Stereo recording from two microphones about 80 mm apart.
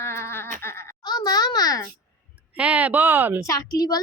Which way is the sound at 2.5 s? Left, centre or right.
Centre.